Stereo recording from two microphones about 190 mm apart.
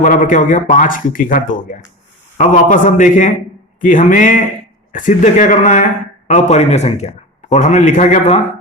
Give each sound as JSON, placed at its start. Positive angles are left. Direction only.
{"t": 0.0, "sound": "a man's voice", "side_deg": 45}